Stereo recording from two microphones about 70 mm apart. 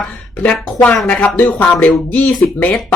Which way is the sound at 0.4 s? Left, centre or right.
Centre.